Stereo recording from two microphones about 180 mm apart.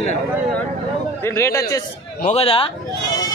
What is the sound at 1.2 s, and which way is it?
Speech, 15° left (ahead or behind).